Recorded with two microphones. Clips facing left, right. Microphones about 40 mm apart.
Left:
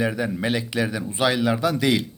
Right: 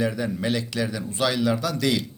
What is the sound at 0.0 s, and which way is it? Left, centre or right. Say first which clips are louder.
A man's voice: left 1 dB; centre.